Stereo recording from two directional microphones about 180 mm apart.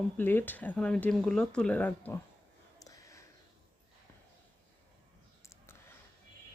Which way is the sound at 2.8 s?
20° left (ahead or behind).